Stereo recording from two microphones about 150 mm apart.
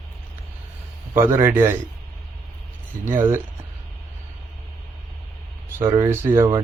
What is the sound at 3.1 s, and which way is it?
Speech, 15° right (ahead or behind).